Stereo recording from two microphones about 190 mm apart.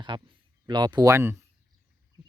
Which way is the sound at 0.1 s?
25° right (ahead or behind).